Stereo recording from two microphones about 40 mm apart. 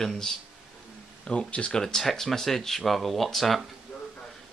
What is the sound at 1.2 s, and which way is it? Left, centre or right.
Speech, left.